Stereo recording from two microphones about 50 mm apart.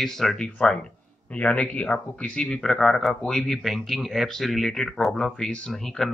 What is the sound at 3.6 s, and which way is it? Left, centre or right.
Speech, centre.